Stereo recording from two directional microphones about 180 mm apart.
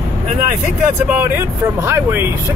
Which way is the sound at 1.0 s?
10° right (ahead or behind).